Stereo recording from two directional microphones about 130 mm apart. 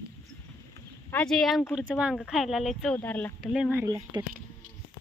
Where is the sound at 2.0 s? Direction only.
5° right (ahead or behind).